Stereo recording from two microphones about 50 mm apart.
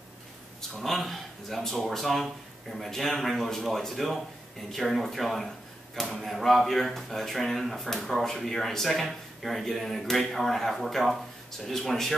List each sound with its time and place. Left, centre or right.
0.6 s speech: centre